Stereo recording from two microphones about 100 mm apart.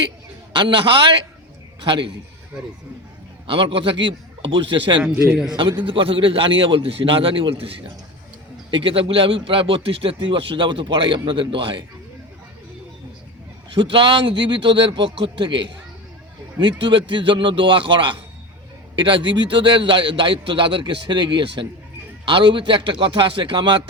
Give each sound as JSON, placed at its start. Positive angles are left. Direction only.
{"t": 0.5, "sound": "a man's voice", "side_deg": -55}
{"t": 3.4, "sound": "a man's voice", "side_deg": -60}
{"t": 13.9, "sound": "a man's voice", "side_deg": -60}